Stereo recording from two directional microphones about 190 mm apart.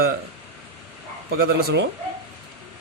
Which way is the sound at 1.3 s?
55° right (ahead or behind).